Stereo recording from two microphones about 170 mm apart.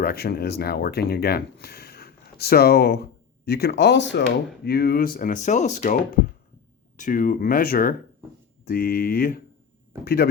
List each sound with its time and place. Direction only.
0.0 s speech: 65° left (ahead or behind); by 4.2 s 90° left
4.6 s speech: 65° left (ahead or behind)